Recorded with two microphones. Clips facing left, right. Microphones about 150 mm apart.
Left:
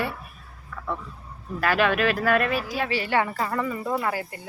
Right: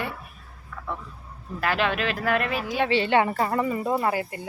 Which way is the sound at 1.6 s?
20° right (ahead or behind).